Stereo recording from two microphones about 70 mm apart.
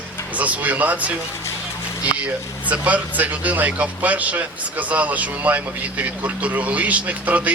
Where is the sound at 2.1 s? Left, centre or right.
Centre.